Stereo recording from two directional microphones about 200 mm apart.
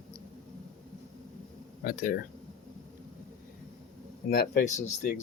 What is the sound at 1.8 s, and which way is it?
Speech, 45° left (ahead or behind).